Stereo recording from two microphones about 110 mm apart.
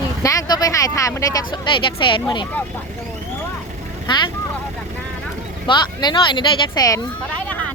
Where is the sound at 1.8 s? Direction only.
50° left (ahead or behind).